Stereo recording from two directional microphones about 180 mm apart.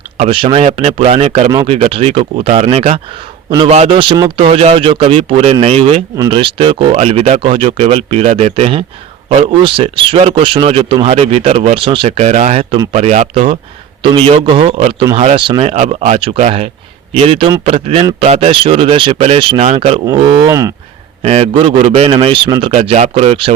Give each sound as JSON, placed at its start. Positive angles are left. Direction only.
{"t": 0.2, "sound": "speech", "side_deg": -30}
{"t": 1.5, "sound": "a man's voice", "side_deg": -20}
{"t": 1.7, "sound": "a man's voice", "side_deg": -35}
{"t": 20.1, "sound": "a man's voice", "side_deg": -25}
{"t": 21.2, "sound": "speech", "side_deg": -35}
{"t": 22.7, "sound": "speech", "side_deg": -35}